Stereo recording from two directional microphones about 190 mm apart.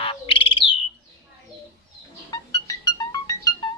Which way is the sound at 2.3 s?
20° left (ahead or behind).